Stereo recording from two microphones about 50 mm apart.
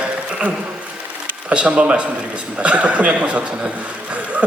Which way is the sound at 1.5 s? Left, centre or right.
Right.